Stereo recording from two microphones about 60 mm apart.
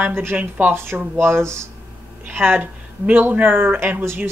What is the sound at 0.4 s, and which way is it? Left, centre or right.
Speech, right.